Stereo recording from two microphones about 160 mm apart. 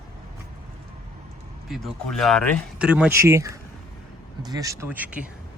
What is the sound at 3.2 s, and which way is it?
Speech, 20° right (ahead or behind).